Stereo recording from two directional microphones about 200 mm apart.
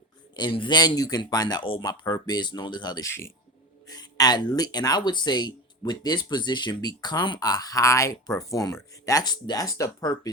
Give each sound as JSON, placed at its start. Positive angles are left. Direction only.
{"t": 0.3, "sound": "speech", "side_deg": 25}